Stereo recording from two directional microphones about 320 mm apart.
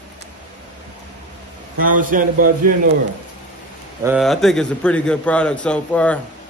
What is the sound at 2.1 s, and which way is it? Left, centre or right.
Speech, right.